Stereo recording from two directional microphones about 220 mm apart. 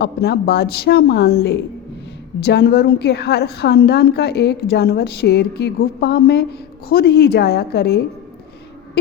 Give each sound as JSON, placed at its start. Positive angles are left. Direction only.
{"t": 0.0, "sound": "a woman's voice", "side_deg": 45}